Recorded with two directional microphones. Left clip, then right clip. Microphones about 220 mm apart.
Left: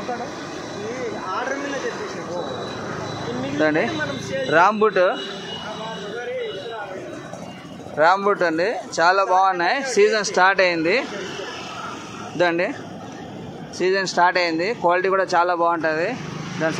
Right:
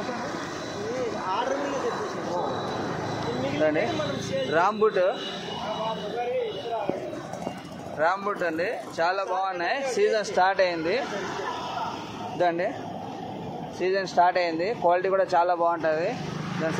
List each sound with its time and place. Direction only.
4.5 s speech: 40° left (ahead or behind)
8.0 s speech: 50° left (ahead or behind)
12.4 s speech: 45° left (ahead or behind)
13.7 s speech: 50° left (ahead or behind)